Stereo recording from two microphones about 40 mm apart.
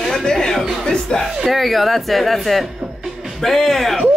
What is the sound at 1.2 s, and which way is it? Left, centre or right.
Speech, centre.